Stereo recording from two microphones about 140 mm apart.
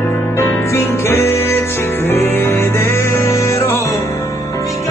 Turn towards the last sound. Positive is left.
turn(degrees=20)  # may be behind; listen again after turning